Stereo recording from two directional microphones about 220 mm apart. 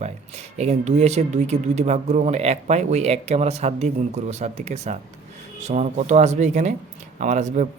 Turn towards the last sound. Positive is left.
turn(degrees=-35)  # may be behind; listen again after turning